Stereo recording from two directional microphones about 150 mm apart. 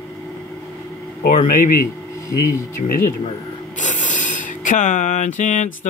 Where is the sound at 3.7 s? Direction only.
55° left (ahead or behind).